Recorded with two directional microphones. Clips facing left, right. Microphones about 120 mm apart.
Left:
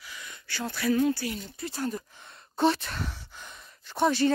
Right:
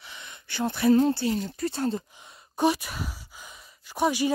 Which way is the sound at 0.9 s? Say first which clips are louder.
Right 4 dB; 30° right (ahead or behind).